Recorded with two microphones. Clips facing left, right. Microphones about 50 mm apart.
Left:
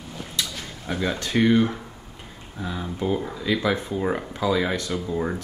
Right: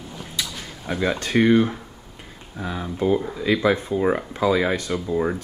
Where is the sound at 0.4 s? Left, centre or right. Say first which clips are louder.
Even; centre.